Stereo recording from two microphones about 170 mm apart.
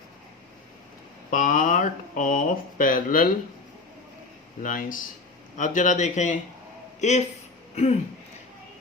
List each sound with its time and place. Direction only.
1.3 s speech: 50° left (ahead or behind)
4.6 s speech: 55° left (ahead or behind)